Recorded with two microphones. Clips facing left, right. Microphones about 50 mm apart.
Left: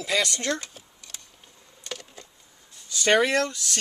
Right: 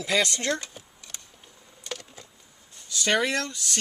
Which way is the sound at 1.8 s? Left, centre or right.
Centre.